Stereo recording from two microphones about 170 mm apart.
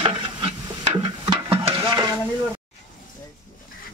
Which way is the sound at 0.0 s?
30° right (ahead or behind).